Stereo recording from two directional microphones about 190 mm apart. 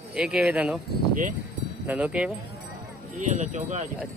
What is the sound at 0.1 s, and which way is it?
Speech, 5° right (ahead or behind).